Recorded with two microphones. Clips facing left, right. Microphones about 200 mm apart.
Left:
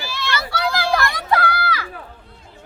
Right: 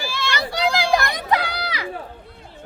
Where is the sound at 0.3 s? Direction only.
20° right (ahead or behind).